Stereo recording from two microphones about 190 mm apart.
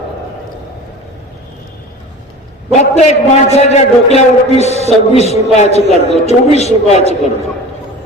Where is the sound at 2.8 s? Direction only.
35° left (ahead or behind).